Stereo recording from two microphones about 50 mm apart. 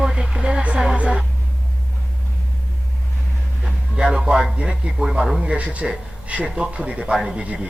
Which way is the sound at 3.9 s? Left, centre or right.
Centre.